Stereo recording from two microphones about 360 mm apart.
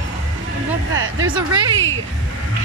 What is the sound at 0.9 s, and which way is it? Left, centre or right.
Speech, right.